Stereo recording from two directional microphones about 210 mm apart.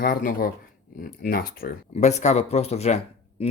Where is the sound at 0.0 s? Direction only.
45° left (ahead or behind).